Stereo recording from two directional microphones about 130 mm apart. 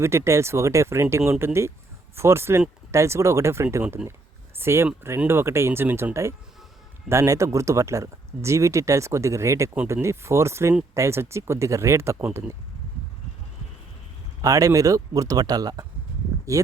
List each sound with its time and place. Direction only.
0.0 s speech: 20° right (ahead or behind)
14.4 s speech: 25° right (ahead or behind)